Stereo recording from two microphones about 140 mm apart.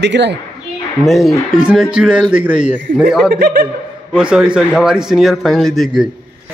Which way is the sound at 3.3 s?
90° right.